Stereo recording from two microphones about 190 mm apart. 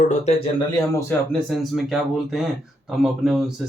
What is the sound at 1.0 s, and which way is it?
Speech, centre (ahead or behind).